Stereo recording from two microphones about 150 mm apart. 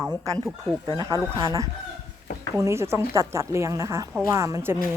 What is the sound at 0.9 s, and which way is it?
A woman's voice, 20° right (ahead or behind).